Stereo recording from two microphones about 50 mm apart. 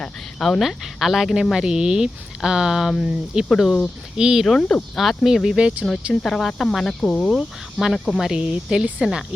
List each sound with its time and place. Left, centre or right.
0.0 s cricket: centre
0.7 s speech: centre
1.5 s speech: centre
4.2 s speech: centre
4.4 s speech: centre
6.2 s speech: centre
7.2 s speech: centre